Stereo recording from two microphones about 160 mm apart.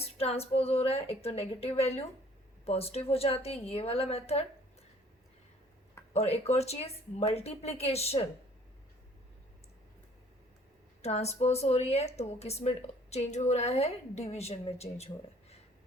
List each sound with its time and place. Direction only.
0.0 s speech: 40° left (ahead or behind)
6.1 s speech: 40° left (ahead or behind)
11.0 s speech: 40° left (ahead or behind)